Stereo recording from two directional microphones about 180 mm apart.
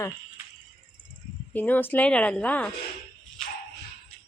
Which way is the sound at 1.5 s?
10° left (ahead or behind).